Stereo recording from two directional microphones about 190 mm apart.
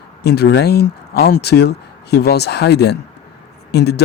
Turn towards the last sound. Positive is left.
turn(degrees=60)  # may be behind; listen again after turning